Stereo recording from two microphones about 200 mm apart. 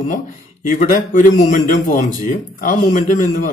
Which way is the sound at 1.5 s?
40° left (ahead or behind).